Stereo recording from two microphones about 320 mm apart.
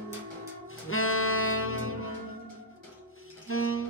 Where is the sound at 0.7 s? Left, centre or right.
Left.